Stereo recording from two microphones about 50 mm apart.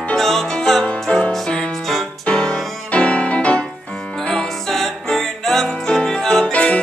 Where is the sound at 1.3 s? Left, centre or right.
Centre.